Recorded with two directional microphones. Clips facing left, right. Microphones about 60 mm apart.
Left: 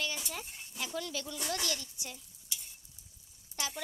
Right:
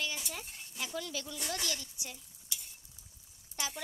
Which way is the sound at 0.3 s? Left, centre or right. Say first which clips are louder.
Left 1 dB; centre.